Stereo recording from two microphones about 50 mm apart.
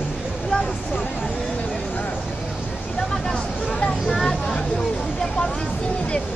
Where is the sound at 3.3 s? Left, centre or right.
Centre.